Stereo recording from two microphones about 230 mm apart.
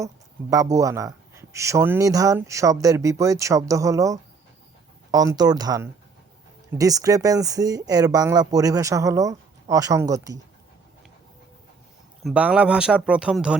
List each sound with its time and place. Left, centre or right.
0.5 s speech: centre
12.2 s speech: centre